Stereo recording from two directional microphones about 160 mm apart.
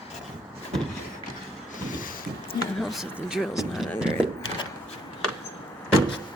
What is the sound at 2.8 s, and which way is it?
Speech, centre (ahead or behind).